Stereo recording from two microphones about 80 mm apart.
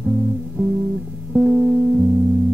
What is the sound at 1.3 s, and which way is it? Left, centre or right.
Music, centre.